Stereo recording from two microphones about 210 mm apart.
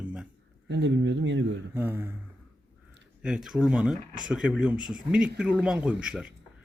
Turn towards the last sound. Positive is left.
turn(degrees=-5)  # may be behind; listen again after turning